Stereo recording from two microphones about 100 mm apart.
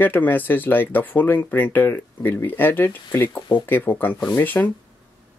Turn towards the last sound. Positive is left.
turn(degrees=20)  # may be behind; listen again after turning